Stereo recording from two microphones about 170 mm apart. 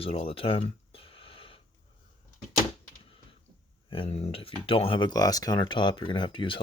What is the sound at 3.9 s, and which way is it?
Speech, 35° left (ahead or behind).